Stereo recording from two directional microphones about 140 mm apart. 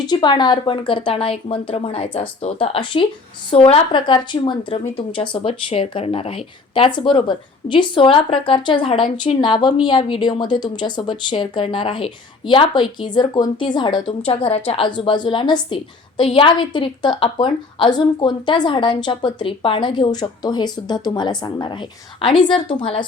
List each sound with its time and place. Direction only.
0.1 s a woman's voice: 30° left (ahead or behind)
14.3 s a woman's voice: 45° left (ahead or behind)